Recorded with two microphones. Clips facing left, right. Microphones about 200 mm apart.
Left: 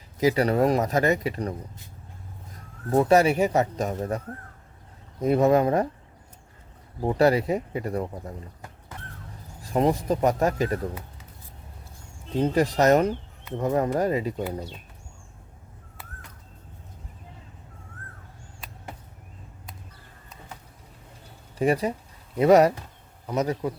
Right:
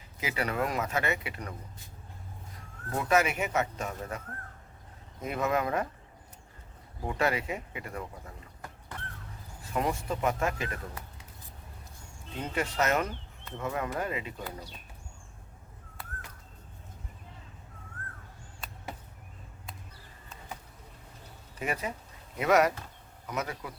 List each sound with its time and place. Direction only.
0.2 s speech: 40° left (ahead or behind)
2.9 s speech: 35° left (ahead or behind)
5.2 s speech: 35° left (ahead or behind)
7.0 s speech: 35° left (ahead or behind)
9.6 s speech: 35° left (ahead or behind)
12.3 s speech: 35° left (ahead or behind)
21.6 s speech: 35° left (ahead or behind)